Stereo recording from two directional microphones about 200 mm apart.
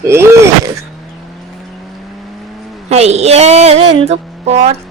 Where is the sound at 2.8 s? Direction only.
30° right (ahead or behind).